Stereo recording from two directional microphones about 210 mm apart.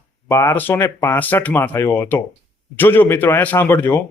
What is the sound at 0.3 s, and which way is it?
Speech, 10° left (ahead or behind).